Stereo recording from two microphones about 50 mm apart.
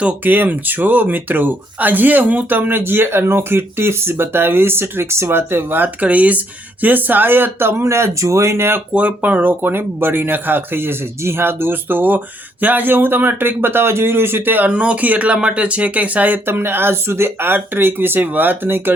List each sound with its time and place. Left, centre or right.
0.0 s speech: right
6.0 s speech: right
9.0 s speech: right
14.7 s speech: right
16.5 s speech: right